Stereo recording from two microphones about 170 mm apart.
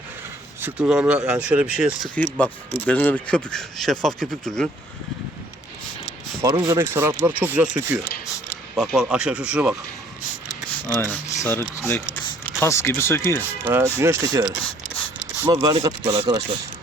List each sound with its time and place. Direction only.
0.6 s speech: 5° right (ahead or behind)
2.1 s speech: 10° left (ahead or behind)
6.5 s speech: 25° right (ahead or behind)
6.7 s speech: 15° right (ahead or behind)
11.3 s speech: 15° left (ahead or behind)
13.7 s speech: 15° right (ahead or behind)